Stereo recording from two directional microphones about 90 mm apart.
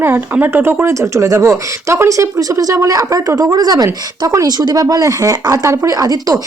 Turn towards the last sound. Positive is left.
turn(degrees=-40)  # may be behind; listen again after turning